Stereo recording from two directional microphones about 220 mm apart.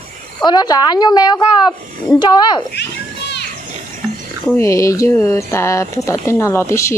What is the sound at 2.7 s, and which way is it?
Children playing, 50° left (ahead or behind).